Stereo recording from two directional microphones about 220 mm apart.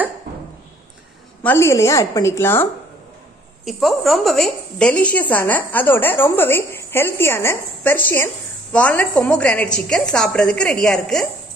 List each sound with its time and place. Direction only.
1.4 s a woman's voice: 10° left (ahead or behind)
3.6 s a woman's voice: centre (ahead or behind)